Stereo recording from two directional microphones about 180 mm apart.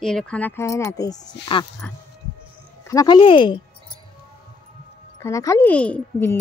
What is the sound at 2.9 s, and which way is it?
Speech, 20° left (ahead or behind).